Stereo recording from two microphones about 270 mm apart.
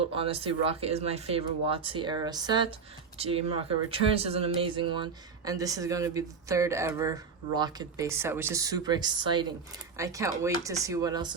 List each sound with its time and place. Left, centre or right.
0.1 s speech: right